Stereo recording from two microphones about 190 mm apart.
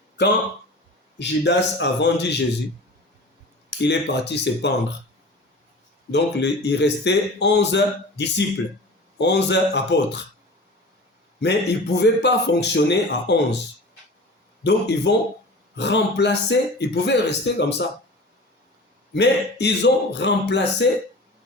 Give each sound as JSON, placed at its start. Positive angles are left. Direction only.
{"t": 1.2, "sound": "speech", "side_deg": 65}
{"t": 3.8, "sound": "speech", "side_deg": 65}
{"t": 6.1, "sound": "speech", "side_deg": 65}
{"t": 11.3, "sound": "speech", "side_deg": 60}
{"t": 14.6, "sound": "speech", "side_deg": 65}
{"t": 19.1, "sound": "speech", "side_deg": 65}